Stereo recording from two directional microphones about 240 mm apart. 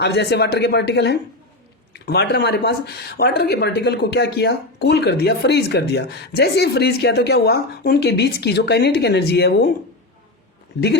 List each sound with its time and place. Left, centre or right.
0.0 s speech: left